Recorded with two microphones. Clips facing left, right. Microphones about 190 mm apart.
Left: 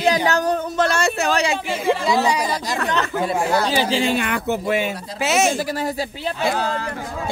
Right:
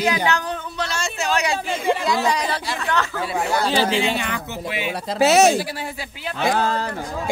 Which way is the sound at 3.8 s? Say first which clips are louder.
Left 1 dB; 35° left (ahead or behind).